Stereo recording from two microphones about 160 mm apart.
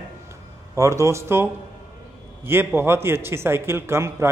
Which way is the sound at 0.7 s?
20° right (ahead or behind).